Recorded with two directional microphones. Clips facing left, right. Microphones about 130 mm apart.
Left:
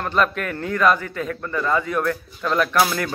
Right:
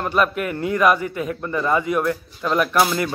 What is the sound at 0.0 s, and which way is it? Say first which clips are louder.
Speech: right 1 dB; 10° right (ahead or behind).